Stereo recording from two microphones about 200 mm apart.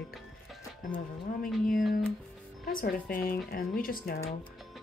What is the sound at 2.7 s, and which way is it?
Speech, 45° left (ahead or behind).